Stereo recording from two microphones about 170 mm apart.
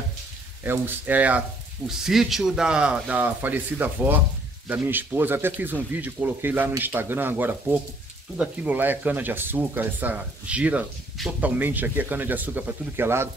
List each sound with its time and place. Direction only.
0.7 s speech: 10° right (ahead or behind)